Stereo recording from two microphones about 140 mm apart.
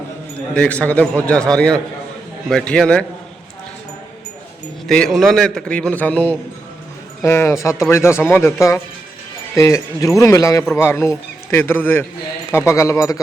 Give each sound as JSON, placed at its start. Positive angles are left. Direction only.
{"t": 0.5, "sound": "a man's voice", "side_deg": 10}
{"t": 4.9, "sound": "a man's voice", "side_deg": 5}